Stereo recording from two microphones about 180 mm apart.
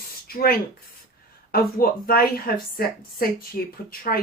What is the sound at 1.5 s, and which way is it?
Speech, 55° left (ahead or behind).